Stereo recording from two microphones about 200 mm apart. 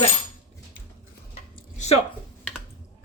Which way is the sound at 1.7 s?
35° left (ahead or behind).